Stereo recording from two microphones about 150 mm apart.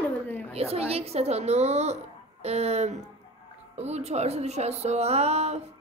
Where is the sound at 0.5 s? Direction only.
40° right (ahead or behind).